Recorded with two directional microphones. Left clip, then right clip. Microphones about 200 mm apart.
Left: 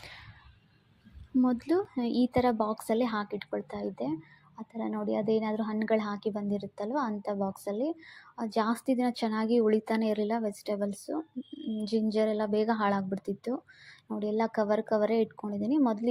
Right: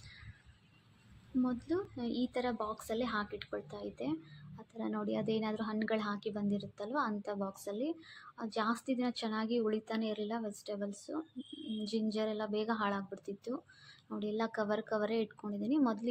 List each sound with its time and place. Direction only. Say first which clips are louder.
1.5 s speech: left 8 dB; 35° left (ahead or behind)